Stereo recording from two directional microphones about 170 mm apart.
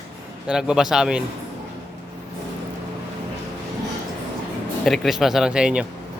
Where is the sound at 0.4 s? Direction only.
5° right (ahead or behind).